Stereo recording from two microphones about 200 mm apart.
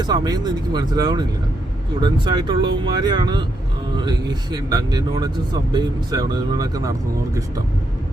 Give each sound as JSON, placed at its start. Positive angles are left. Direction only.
{"t": 0.0, "sound": "speech", "side_deg": -20}
{"t": 4.5, "sound": "speech", "side_deg": -20}